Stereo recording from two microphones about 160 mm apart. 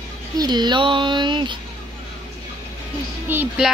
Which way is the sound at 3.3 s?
15° right (ahead or behind).